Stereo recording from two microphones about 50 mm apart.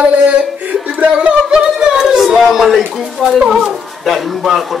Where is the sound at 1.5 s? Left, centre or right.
Centre.